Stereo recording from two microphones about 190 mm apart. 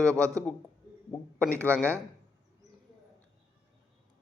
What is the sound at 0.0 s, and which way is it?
A man's voice, 15° right (ahead or behind).